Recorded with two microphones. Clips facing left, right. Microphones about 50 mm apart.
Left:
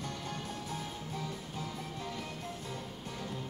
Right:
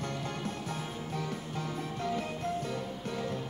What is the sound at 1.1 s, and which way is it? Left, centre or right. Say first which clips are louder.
Music: right 4 dB; right.